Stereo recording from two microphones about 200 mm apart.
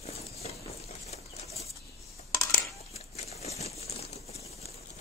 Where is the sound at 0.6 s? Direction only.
30° left (ahead or behind).